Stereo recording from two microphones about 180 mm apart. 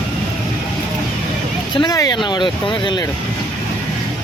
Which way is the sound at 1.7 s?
20° left (ahead or behind).